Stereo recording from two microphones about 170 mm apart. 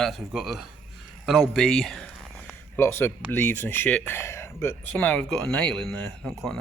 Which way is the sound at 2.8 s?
15° left (ahead or behind).